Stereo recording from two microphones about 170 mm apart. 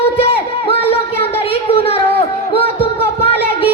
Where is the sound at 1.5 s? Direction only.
35° left (ahead or behind).